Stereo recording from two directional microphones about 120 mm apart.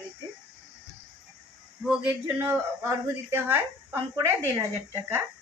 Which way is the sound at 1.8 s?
10° right (ahead or behind).